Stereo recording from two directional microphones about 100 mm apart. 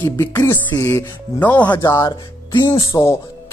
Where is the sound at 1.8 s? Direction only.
35° left (ahead or behind).